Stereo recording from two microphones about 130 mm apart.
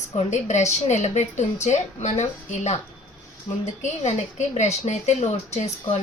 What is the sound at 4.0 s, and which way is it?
Speech, 55° left (ahead or behind).